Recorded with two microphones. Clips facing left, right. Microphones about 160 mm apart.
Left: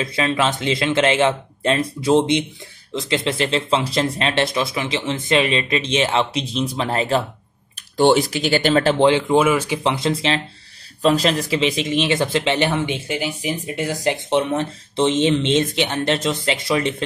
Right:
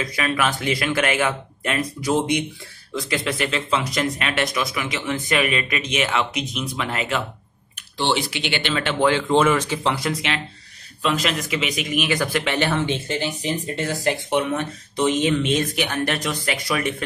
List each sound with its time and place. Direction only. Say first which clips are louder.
0.0 s a man's voice: left 3 dB; 25° left (ahead or behind); by 8.9 s 40° left (ahead or behind)
9.3 s speech: left 2 dB; 10° left (ahead or behind)
9.8 s a man's voice: left 6 dB; 25° left (ahead or behind)